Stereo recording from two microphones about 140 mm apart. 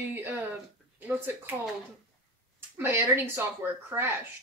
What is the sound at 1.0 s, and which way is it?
Speech, 15° right (ahead or behind).